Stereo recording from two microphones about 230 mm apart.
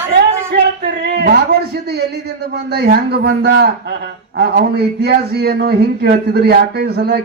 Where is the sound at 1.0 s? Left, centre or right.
Right.